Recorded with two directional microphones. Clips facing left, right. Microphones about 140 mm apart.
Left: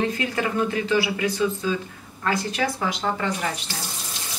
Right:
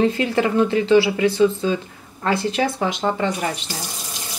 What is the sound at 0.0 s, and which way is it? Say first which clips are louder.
Speech: right 6 dB; 30° right (ahead or behind).